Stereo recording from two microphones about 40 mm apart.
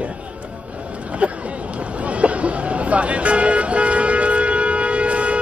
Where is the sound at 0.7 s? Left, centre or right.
Right.